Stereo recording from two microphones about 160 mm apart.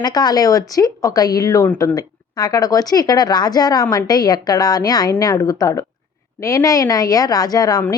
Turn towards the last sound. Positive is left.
turn(degrees=25)  # may be behind; listen again after turning